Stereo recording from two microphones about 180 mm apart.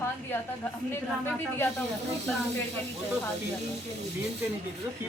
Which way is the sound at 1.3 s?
15° left (ahead or behind).